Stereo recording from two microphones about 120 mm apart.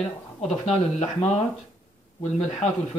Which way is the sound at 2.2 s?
70° left (ahead or behind).